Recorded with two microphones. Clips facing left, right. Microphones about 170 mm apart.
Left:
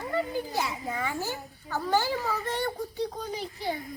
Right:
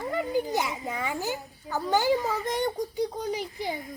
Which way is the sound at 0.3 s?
20° right (ahead or behind).